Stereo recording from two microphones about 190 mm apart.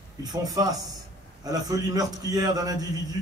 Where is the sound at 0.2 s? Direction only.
20° right (ahead or behind).